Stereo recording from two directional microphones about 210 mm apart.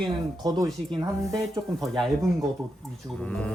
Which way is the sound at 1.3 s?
Centre (ahead or behind).